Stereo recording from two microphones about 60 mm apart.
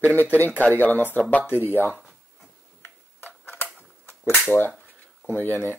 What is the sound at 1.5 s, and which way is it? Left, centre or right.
Speech, right.